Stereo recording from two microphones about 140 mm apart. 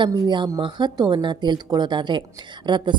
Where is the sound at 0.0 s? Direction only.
30° right (ahead or behind).